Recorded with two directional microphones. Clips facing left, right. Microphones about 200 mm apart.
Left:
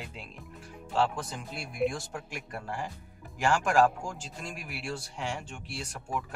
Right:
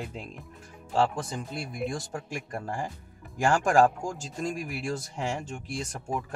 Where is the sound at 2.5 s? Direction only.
45° right (ahead or behind).